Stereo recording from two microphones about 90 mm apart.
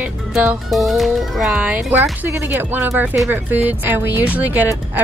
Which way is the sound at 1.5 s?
15° right (ahead or behind).